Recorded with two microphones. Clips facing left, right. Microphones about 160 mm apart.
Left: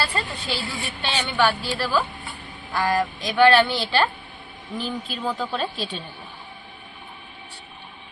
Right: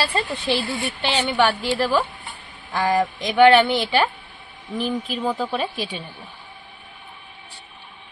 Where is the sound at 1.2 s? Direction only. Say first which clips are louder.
Right 1 dB; 25° right (ahead or behind).